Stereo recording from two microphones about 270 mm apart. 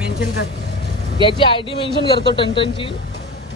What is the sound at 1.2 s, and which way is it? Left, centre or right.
Speech, centre.